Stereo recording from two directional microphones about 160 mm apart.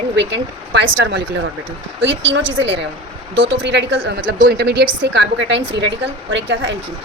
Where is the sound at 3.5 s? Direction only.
90° right.